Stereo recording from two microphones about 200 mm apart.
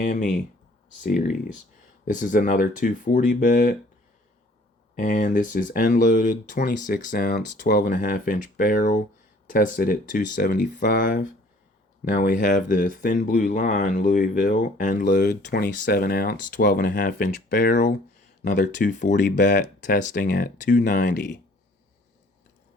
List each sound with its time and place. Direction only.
0.0 s speech: 40° left (ahead or behind)
4.9 s speech: 40° left (ahead or behind)